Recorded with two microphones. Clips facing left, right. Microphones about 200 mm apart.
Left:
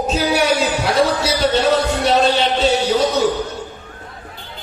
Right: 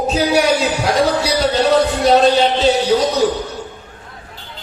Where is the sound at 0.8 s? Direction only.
35° right (ahead or behind).